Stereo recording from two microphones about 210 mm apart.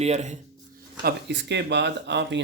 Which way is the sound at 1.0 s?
50° right (ahead or behind).